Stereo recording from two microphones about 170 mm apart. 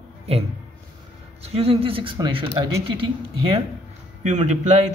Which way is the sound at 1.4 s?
35° right (ahead or behind).